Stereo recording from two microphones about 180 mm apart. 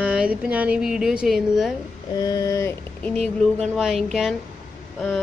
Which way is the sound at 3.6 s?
Centre (ahead or behind).